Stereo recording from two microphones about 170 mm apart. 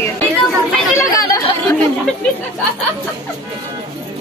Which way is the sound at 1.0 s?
20° left (ahead or behind).